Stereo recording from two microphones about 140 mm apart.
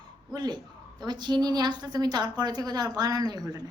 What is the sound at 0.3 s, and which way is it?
A woman's voice, 30° right (ahead or behind).